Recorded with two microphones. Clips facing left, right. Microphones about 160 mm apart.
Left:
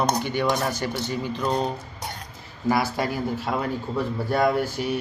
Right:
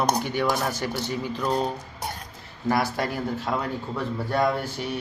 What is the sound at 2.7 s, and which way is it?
Speech, 5° left (ahead or behind).